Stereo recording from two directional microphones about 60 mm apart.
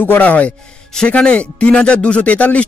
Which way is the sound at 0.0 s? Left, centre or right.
Left.